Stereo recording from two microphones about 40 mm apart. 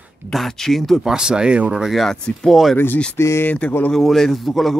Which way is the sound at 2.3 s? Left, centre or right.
Left.